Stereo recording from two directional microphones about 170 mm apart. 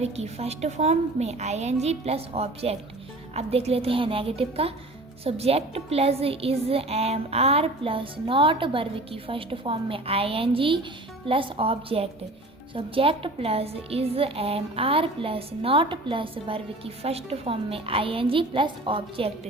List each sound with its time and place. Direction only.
0.0 s speech: 40° right (ahead or behind)